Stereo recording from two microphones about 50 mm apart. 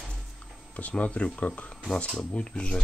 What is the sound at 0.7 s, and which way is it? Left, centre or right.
Speech, left.